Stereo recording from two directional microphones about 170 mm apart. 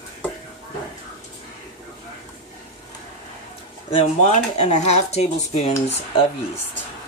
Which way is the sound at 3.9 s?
40° left (ahead or behind).